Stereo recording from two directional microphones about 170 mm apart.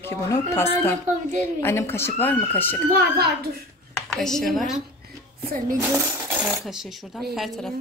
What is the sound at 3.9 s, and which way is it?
Speech, centre (ahead or behind).